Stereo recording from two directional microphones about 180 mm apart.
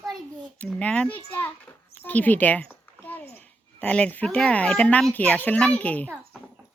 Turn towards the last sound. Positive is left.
turn(degrees=10)  # may be behind; listen again after turning